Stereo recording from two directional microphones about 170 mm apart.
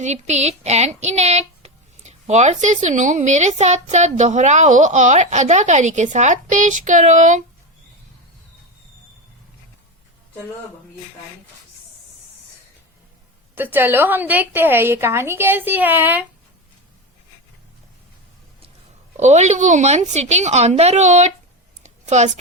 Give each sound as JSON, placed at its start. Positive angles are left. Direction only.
{"t": 0.0, "sound": "speech", "side_deg": -40}
{"t": 13.6, "sound": "a woman's voice", "side_deg": -10}
{"t": 19.1, "sound": "a woman's voice", "side_deg": -45}
{"t": 21.8, "sound": "a sound", "side_deg": -40}